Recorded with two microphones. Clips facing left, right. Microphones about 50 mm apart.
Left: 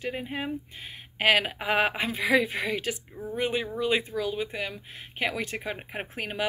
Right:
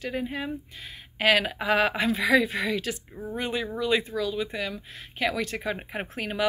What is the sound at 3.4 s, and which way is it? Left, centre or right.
Speech, left.